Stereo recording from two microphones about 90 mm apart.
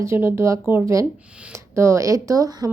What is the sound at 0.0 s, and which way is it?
A woman's voice, 30° right (ahead or behind).